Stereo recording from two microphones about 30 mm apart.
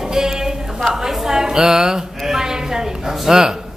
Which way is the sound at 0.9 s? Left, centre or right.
Centre.